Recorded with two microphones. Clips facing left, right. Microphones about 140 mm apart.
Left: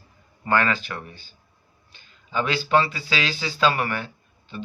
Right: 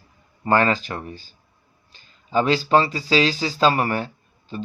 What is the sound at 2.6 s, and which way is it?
Speech, 35° right (ahead or behind).